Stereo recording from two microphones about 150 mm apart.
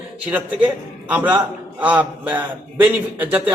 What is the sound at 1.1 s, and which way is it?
A man's voice, 10° right (ahead or behind).